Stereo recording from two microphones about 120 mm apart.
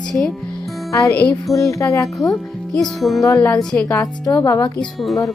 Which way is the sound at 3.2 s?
25° left (ahead or behind).